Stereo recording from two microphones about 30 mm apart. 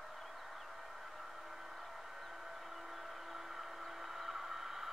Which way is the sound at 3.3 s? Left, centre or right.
Centre.